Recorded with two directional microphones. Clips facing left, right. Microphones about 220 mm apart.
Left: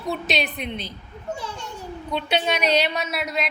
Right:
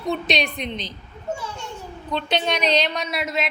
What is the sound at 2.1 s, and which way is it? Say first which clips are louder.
A woman's voice: even; 10° left (ahead or behind).